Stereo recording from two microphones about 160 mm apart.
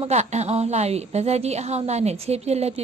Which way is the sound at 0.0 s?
45° right (ahead or behind).